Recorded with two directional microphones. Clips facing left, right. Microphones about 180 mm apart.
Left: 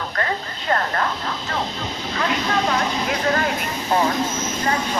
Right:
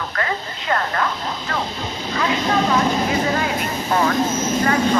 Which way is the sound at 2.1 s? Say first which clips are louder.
Right 3 dB; 55° left (ahead or behind).